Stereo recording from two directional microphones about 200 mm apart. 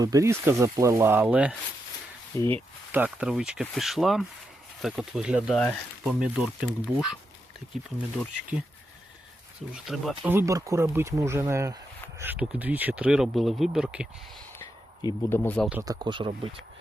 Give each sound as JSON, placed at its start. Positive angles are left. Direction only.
{"t": 0.0, "sound": "speech", "side_deg": -15}
{"t": 2.3, "sound": "speech", "side_deg": 10}
{"t": 2.9, "sound": "speech", "side_deg": -5}
{"t": 9.7, "sound": "speech", "side_deg": 0}
{"t": 10.2, "sound": "speech", "side_deg": -15}
{"t": 14.6, "sound": "a sound", "side_deg": 15}
{"t": 15.5, "sound": "speech", "side_deg": 0}
{"t": 15.8, "sound": "speech", "side_deg": -20}